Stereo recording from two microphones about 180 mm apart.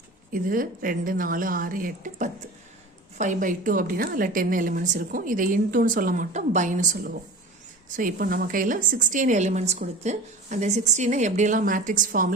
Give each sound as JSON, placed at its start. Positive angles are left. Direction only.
{"t": 0.3, "sound": "a woman's voice", "side_deg": -50}